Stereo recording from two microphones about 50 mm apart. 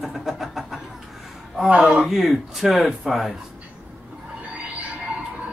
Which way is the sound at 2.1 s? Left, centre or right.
Centre.